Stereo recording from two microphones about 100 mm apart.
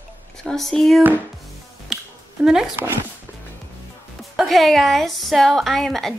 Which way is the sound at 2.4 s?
5° right (ahead or behind).